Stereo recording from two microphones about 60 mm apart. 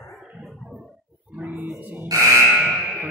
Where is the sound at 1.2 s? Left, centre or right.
Right.